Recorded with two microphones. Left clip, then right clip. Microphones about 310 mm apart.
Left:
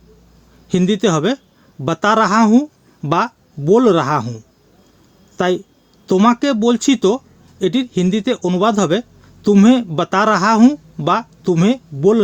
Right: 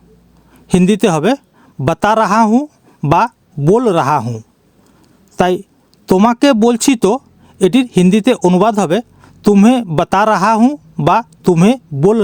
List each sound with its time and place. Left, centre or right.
0.7 s speech: right